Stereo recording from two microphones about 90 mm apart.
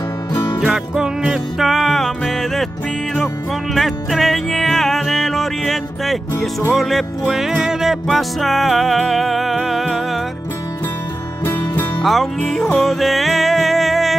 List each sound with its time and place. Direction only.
0.3 s music: 50° left (ahead or behind)
0.6 s music: 5° right (ahead or behind)
3.7 s music: centre (ahead or behind)
12.0 s music: centre (ahead or behind)